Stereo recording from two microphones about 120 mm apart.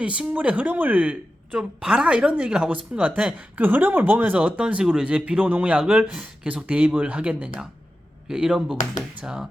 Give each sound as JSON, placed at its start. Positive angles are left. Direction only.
{"t": 0.0, "sound": "speech", "side_deg": -10}